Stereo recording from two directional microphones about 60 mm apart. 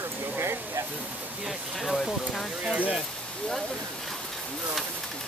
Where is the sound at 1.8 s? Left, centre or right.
Centre.